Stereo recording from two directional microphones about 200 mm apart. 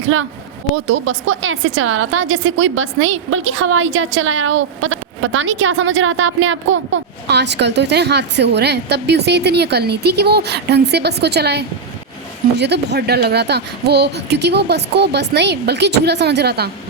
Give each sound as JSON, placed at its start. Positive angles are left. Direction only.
{"t": 0.9, "sound": "a woman's voice", "side_deg": -75}